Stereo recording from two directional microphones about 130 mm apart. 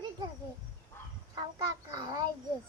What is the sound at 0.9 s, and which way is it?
Fowl, 15° left (ahead or behind).